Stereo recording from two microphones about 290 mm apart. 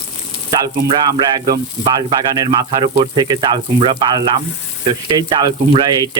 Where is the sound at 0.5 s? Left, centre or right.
Centre.